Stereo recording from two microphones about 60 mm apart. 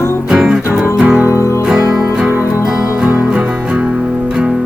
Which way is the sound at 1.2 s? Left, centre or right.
Right.